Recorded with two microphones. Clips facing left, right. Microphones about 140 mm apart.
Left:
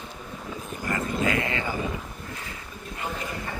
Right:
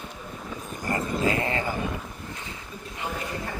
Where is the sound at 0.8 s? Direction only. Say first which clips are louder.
Right 1 dB; 30° right (ahead or behind).